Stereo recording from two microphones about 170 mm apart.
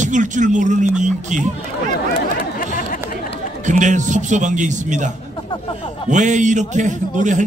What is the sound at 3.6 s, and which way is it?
A man's voice, 45° right (ahead or behind).